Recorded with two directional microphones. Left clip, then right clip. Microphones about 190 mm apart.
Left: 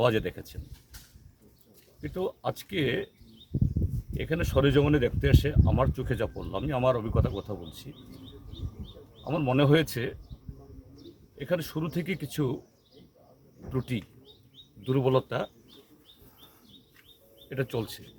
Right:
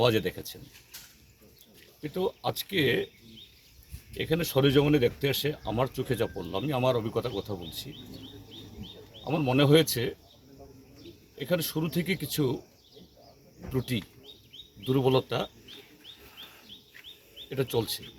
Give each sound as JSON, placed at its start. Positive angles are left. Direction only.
{"t": 0.0, "sound": "speech", "side_deg": 0}
{"t": 2.0, "sound": "speech", "side_deg": 0}
{"t": 4.2, "sound": "speech", "side_deg": 0}
{"t": 9.2, "sound": "speech", "side_deg": 0}
{"t": 11.3, "sound": "speech", "side_deg": 5}
{"t": 14.8, "sound": "speech", "side_deg": 5}
{"t": 17.5, "sound": "speech", "side_deg": 5}